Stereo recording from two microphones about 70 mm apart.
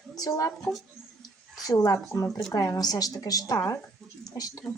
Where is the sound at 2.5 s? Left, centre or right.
Left.